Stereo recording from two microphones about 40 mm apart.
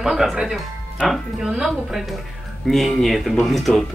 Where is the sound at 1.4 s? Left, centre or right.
Centre.